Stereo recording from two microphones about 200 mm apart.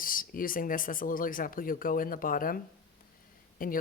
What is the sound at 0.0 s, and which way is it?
Speech, 45° left (ahead or behind).